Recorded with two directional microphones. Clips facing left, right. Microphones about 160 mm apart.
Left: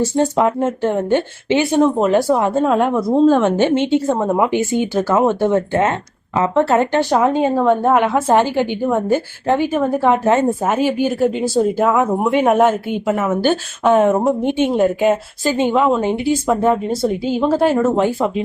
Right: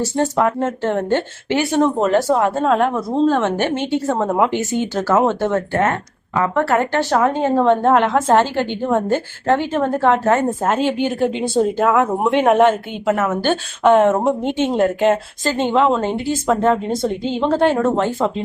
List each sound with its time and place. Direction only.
0.0 s speech: 20° left (ahead or behind)
7.5 s speech: 5° left (ahead or behind)